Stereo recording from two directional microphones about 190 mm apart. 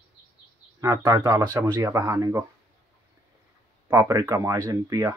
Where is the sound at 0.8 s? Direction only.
20° right (ahead or behind).